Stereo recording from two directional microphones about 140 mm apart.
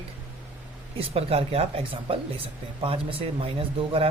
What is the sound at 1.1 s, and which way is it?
Speech, 45° right (ahead or behind).